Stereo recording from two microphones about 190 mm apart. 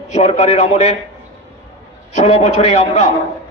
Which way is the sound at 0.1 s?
35° left (ahead or behind).